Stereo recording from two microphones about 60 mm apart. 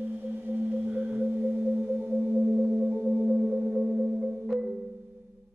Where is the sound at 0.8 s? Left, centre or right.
Right.